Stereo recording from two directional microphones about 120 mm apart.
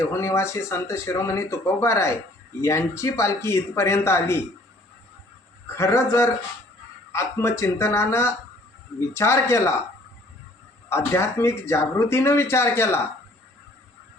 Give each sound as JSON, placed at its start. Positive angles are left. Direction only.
{"t": 0.1, "sound": "speech", "side_deg": 25}
{"t": 5.6, "sound": "speech", "side_deg": 25}
{"t": 10.8, "sound": "speech", "side_deg": 25}